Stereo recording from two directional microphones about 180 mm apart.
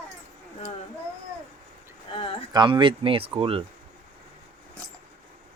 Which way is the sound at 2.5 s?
25° right (ahead or behind).